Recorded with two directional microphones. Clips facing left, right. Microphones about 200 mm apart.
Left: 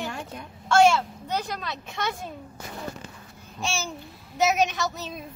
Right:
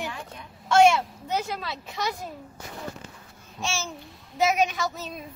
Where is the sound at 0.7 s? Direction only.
10° right (ahead or behind).